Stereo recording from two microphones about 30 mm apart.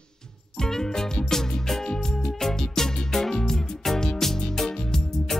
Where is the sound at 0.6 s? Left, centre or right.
Centre.